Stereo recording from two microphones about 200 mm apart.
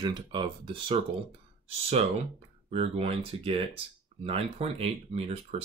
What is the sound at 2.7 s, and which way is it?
Speech, 30° right (ahead or behind).